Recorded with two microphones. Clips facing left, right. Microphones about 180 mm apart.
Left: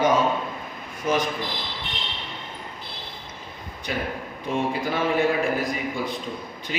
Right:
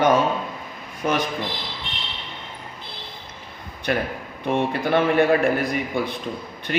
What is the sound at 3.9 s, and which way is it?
A man's voice, 65° right (ahead or behind).